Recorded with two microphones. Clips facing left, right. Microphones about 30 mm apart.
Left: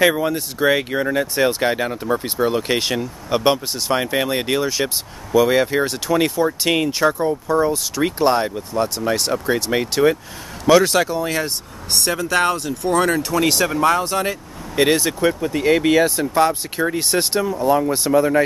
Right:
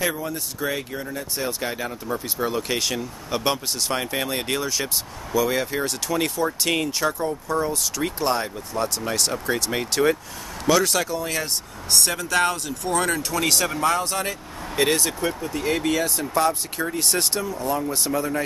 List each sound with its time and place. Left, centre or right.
0.0 s speech: left
1.0 s speech: left
1.6 s speech: left; by 15.2 s centre
15.2 s speech: left